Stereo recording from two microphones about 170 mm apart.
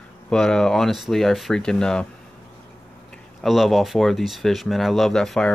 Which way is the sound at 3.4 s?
Centre (ahead or behind).